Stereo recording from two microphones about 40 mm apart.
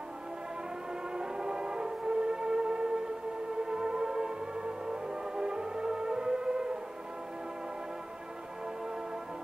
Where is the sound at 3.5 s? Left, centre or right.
Centre.